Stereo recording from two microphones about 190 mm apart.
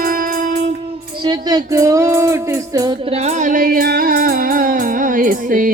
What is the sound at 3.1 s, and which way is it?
Music, 35° right (ahead or behind).